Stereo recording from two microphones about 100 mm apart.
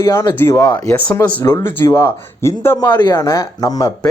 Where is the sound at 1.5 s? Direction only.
50° left (ahead or behind).